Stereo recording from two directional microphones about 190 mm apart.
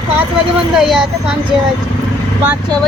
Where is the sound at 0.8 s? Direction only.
Centre (ahead or behind).